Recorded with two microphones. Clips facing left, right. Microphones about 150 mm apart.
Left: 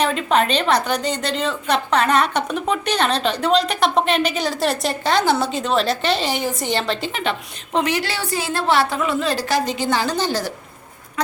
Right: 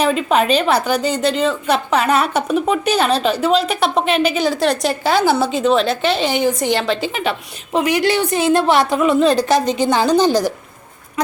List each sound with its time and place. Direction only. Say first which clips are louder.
0.0 s a woman's voice: right 3 dB; 5° right (ahead or behind)